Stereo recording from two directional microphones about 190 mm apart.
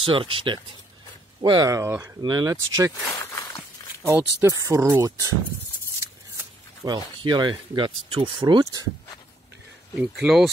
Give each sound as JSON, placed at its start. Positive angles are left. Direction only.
{"t": 0.0, "sound": "speech", "side_deg": -30}
{"t": 3.1, "sound": "a sound", "side_deg": 15}
{"t": 4.0, "sound": "speech", "side_deg": -10}
{"t": 6.3, "sound": "speech", "side_deg": -20}
{"t": 9.9, "sound": "speech", "side_deg": -5}